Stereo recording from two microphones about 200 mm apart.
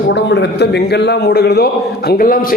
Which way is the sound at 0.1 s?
60° left (ahead or behind).